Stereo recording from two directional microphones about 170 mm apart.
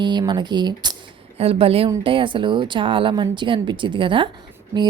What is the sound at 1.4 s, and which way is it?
A woman's voice, 35° right (ahead or behind).